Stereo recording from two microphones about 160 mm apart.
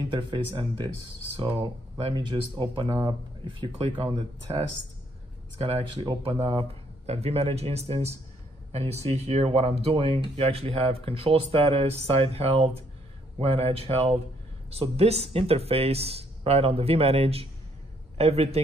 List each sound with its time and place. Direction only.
0.1 s speech: 30° right (ahead or behind)
6.0 s a man's voice: 30° right (ahead or behind)